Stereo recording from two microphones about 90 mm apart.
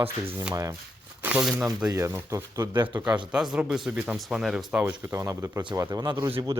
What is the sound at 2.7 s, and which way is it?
Speech, 50° right (ahead or behind).